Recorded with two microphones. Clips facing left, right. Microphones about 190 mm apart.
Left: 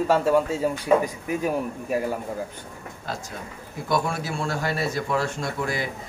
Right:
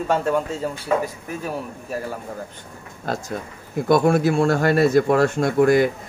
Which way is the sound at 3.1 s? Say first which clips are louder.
Right 7 dB; 50° right (ahead or behind).